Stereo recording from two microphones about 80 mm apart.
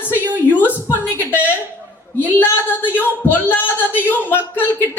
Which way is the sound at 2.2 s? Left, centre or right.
Left.